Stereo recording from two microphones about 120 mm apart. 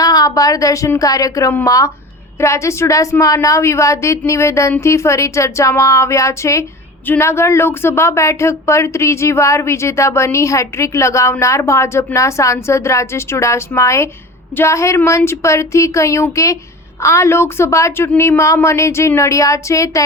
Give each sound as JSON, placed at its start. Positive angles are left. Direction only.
{"t": 0.0, "sound": "a woman's voice", "side_deg": 30}